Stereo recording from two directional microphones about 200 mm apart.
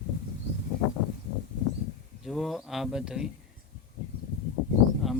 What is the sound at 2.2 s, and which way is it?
Speech, centre (ahead or behind).